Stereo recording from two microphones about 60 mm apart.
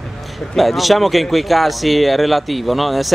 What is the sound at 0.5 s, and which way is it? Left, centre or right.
Speech, centre.